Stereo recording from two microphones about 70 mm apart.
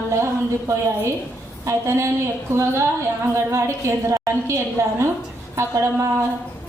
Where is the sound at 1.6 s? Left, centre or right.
Right.